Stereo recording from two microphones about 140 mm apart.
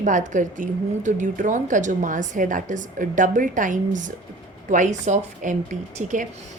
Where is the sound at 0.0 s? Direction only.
65° right (ahead or behind).